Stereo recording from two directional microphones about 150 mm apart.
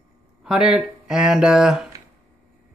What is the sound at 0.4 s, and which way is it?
Speech, 5° right (ahead or behind).